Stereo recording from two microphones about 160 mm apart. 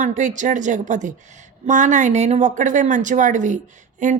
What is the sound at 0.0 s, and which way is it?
Speech, 50° right (ahead or behind).